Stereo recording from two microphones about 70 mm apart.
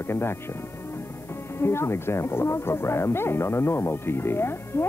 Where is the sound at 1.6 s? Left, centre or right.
Left.